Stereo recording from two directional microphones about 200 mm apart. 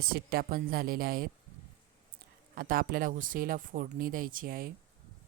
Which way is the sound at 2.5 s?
45° right (ahead or behind).